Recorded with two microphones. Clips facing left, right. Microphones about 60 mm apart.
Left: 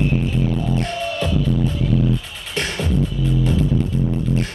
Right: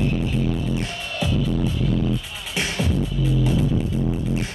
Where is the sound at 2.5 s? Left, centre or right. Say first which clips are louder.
Left 1 dB; centre.